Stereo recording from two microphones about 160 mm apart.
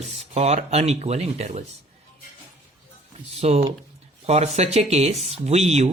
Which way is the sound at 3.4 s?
40° right (ahead or behind).